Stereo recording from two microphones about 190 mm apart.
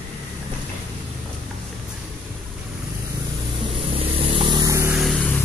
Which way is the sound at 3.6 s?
30° right (ahead or behind).